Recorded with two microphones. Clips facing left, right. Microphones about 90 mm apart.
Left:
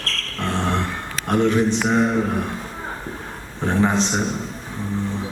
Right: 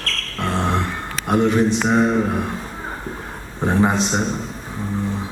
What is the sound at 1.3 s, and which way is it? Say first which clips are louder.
Speech: right 1 dB; 15° right (ahead or behind).